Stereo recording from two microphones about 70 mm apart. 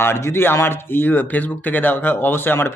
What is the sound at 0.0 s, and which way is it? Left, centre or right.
Speech, left.